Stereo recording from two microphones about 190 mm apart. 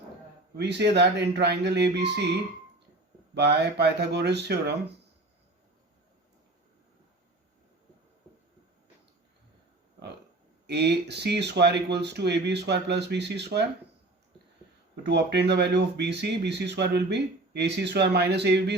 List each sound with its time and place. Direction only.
0.5 s speech: 60° right (ahead or behind)
10.7 s speech: 60° right (ahead or behind)
15.0 s speech: 65° right (ahead or behind)